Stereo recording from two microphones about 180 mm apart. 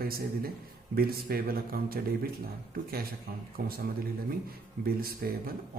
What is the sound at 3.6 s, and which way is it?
Speech, 55° right (ahead or behind).